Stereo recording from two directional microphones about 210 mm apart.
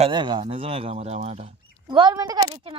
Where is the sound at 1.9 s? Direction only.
20° right (ahead or behind).